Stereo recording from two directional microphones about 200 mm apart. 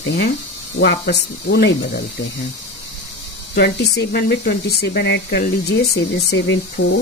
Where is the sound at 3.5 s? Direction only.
55° left (ahead or behind).